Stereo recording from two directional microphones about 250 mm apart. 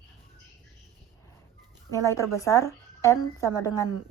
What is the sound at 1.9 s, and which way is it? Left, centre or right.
A woman's voice, centre.